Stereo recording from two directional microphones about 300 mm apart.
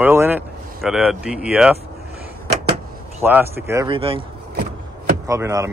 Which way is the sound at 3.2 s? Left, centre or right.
Centre.